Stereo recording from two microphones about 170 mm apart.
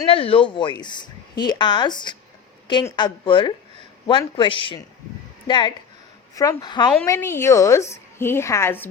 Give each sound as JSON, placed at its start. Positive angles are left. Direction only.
{"t": 0.1, "sound": "speech", "side_deg": 35}
{"t": 7.1, "sound": "a woman's voice", "side_deg": 15}